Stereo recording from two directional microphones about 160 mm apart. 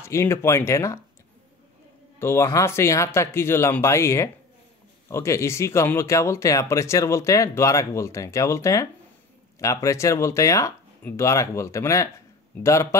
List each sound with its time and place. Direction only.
0.0 s speech: 15° left (ahead or behind)
2.1 s speech: 15° left (ahead or behind)